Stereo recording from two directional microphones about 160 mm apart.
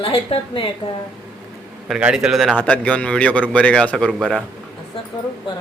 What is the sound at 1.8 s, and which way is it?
A man's voice, 5° right (ahead or behind).